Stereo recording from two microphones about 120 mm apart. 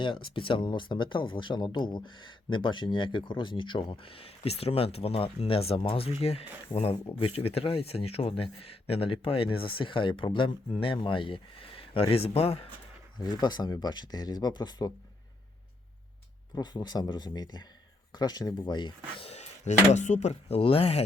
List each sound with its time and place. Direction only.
0.0 s speech: 45° left (ahead or behind)
13.1 s speech: 35° left (ahead or behind)
16.6 s speech: 35° left (ahead or behind)
19.3 s speech: 70° left (ahead or behind); by 21.0 s 55° left (ahead or behind)